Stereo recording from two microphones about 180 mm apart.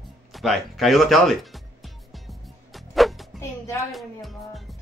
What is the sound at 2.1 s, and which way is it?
Music, centre (ahead or behind).